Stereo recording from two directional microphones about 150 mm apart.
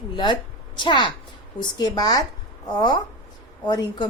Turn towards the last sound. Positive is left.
turn(degrees=30)  # may be behind; listen again after turning